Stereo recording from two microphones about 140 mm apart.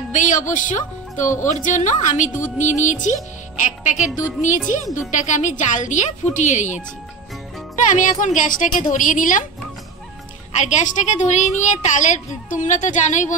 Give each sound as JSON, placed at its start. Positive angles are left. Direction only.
{"t": 0.1, "sound": "a woman's voice", "side_deg": 60}
{"t": 5.1, "sound": "a woman's voice", "side_deg": 60}
{"t": 7.9, "sound": "a woman's voice", "side_deg": 65}
{"t": 10.5, "sound": "a woman's voice", "side_deg": 60}